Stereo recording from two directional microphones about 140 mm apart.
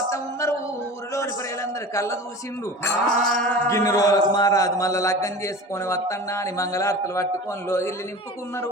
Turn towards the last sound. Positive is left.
turn(degrees=20)  # may be behind; listen again after turning